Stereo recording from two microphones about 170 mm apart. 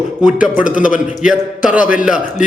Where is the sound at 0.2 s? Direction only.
5° right (ahead or behind).